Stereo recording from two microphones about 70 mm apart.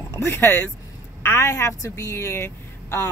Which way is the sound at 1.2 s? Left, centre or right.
Left.